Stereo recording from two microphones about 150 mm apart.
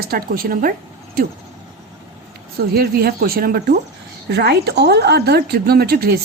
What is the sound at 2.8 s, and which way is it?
Speech, 85° right.